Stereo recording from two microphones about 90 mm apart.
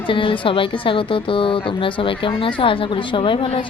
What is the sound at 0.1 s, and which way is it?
A woman's voice, 75° left (ahead or behind).